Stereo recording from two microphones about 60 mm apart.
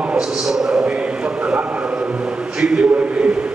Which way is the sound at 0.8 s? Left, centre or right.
Centre.